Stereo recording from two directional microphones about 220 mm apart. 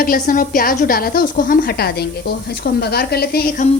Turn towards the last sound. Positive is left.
turn(degrees=45)  # may be behind; listen again after turning